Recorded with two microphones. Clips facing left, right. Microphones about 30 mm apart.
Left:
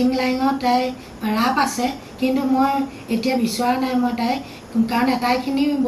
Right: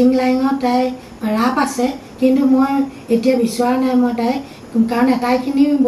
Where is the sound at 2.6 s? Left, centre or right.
Centre.